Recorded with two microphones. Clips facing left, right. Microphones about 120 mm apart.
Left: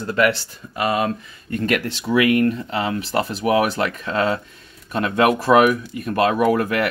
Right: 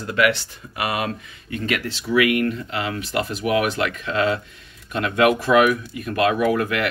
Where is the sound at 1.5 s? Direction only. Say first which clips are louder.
Left 4 dB; 45° left (ahead or behind).